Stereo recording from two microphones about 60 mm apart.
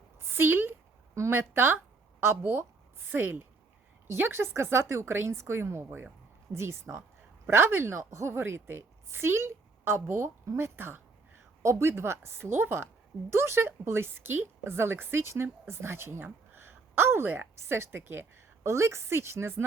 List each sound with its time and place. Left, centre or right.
0.2 s a sound: right
1.3 s a woman's voice: right
3.1 s a woman's voice: right
10.4 s speech: right
10.8 s a woman's voice: right